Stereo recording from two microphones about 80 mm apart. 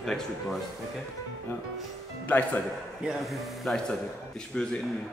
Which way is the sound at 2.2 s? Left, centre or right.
Left.